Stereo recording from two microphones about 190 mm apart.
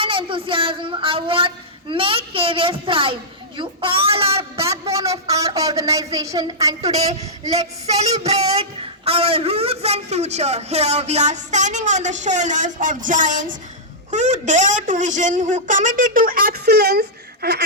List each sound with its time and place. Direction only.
0.0 s speech: 25° right (ahead or behind)
4.9 s a woman's voice: 15° right (ahead or behind)
6.8 s speech: 35° right (ahead or behind); by 17.6 s 60° right (ahead or behind)